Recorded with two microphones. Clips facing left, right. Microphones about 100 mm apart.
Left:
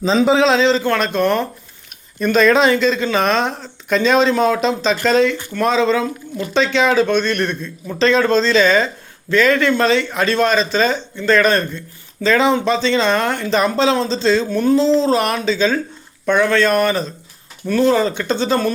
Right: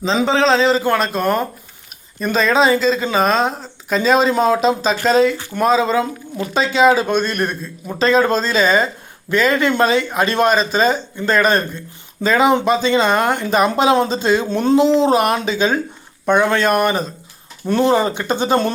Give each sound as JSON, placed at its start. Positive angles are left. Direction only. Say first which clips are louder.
{"t": 0.0, "sound": "speech", "louder": "left 2 dB", "side_deg": 0}